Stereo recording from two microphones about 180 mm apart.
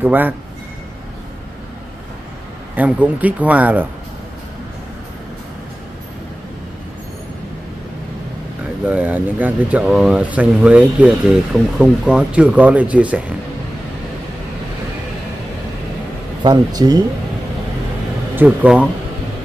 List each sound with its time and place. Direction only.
0.0 s speech: 10° right (ahead or behind)
2.7 s speech: 10° right (ahead or behind)
8.8 s speech: 10° right (ahead or behind)
16.4 s speech: 20° right (ahead or behind)
18.3 s speech: 10° right (ahead or behind)